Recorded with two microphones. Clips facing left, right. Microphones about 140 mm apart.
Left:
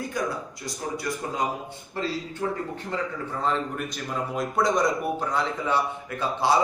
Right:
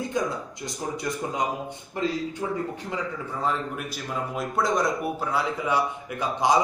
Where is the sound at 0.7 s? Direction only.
20° right (ahead or behind).